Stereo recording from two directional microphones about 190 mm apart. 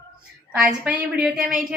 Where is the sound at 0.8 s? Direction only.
5° right (ahead or behind).